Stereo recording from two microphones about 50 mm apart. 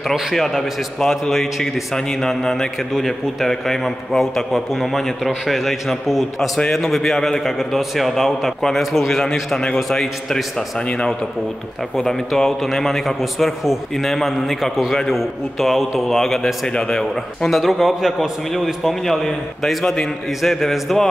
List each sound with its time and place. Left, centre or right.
0.1 s a man's voice: centre
0.6 s a man's voice: centre
6.7 s a man's voice: centre
12.4 s a man's voice: centre
16.6 s a man's voice: centre
17.0 s a man's voice: centre